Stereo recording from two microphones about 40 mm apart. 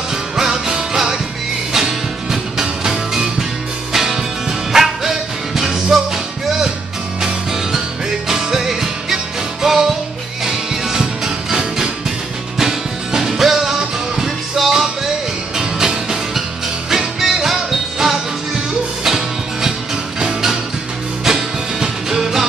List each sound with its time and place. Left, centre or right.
0.4 s music: centre
8.3 s music: centre